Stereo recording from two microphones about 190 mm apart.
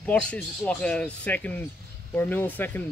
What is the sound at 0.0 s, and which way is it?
Speech, 5° left (ahead or behind).